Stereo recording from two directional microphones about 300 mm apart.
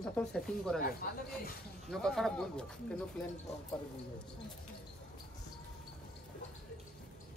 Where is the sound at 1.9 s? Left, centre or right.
Centre.